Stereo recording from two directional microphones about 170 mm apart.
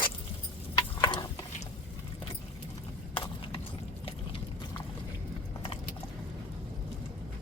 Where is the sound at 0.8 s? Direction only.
30° left (ahead or behind).